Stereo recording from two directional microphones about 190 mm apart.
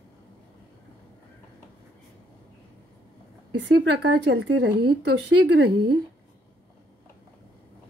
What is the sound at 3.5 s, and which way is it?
Speech, 65° right (ahead or behind).